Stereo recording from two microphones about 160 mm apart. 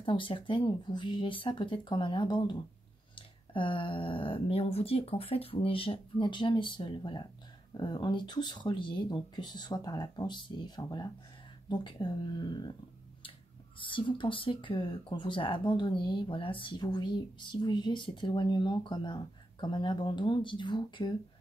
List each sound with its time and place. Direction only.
0.0 s speech: 30° left (ahead or behind)
13.7 s speech: 30° left (ahead or behind)